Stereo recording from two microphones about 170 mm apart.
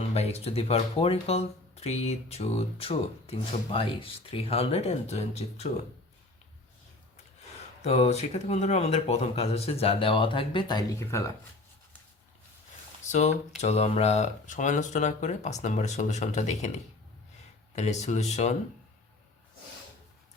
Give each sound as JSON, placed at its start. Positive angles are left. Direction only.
{"t": 0.1, "sound": "speech", "side_deg": 40}
{"t": 7.8, "sound": "speech", "side_deg": 40}
{"t": 13.1, "sound": "speech", "side_deg": 45}